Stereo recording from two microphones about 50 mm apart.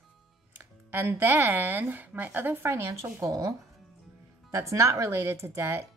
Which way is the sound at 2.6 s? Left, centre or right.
Right.